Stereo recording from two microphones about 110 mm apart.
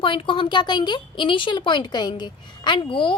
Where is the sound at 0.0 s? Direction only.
50° left (ahead or behind).